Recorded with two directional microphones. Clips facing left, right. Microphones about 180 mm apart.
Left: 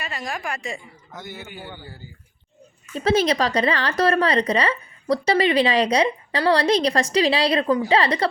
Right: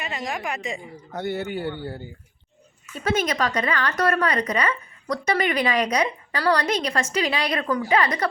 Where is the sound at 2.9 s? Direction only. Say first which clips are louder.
Left 5 dB; 35° left (ahead or behind).